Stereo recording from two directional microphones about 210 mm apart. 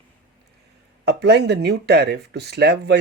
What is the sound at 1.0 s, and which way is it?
Speech, 50° right (ahead or behind).